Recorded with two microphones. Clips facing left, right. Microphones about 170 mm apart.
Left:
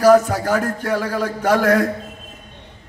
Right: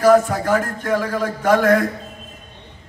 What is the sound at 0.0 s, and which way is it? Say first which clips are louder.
A man's voice: left 1 dB; 35° left (ahead or behind).